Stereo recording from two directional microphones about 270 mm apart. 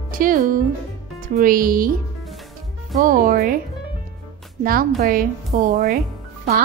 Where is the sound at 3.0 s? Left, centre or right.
Right.